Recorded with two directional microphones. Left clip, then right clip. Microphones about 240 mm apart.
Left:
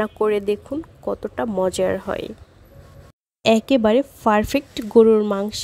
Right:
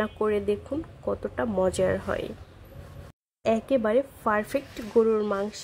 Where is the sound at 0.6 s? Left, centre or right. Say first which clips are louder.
Left 4 dB; left.